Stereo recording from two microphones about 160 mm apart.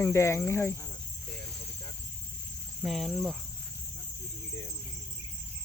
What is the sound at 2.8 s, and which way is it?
Speech, centre (ahead or behind).